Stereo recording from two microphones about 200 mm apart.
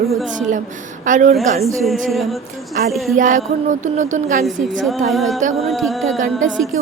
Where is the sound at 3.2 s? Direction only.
40° right (ahead or behind).